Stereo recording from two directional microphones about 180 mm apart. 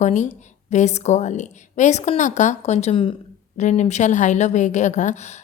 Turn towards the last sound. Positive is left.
turn(degrees=45)  # may be behind; listen again after turning